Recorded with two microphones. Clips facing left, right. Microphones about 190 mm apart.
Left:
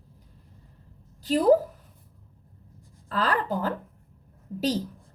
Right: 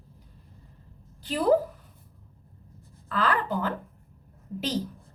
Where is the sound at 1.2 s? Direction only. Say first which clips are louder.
Left 6 dB; 40° left (ahead or behind).